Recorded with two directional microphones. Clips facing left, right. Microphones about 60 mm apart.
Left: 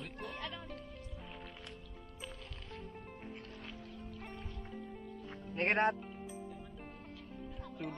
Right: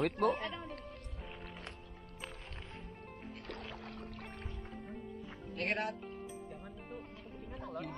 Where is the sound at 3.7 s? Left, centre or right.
Right.